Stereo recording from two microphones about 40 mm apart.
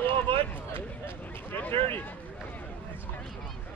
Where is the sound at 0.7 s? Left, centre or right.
Left.